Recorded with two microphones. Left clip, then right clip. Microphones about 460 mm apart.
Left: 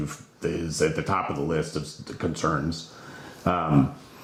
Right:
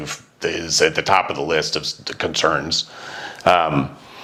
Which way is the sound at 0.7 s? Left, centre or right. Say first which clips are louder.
Right 10 dB; right.